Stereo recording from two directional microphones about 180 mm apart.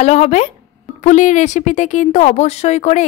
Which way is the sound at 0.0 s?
35° left (ahead or behind).